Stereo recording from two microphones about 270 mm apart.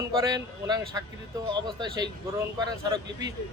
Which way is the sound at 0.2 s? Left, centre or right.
Centre.